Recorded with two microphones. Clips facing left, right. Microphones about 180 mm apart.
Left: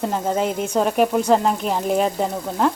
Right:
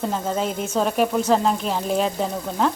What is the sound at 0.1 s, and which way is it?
Stir, 15° left (ahead or behind).